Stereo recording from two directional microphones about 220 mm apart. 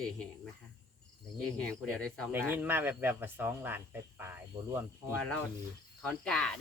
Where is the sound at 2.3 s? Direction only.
10° right (ahead or behind).